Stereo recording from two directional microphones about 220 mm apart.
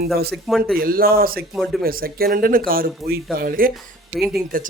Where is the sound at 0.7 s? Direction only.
40° right (ahead or behind).